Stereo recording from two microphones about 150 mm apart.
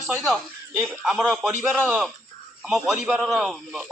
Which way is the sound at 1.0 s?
5° right (ahead or behind).